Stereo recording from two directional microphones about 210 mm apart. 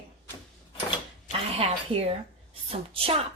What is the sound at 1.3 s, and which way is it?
A woman's voice, 30° right (ahead or behind).